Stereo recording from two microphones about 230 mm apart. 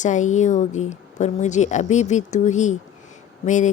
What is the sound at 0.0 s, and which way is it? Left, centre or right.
A woman's voice, left.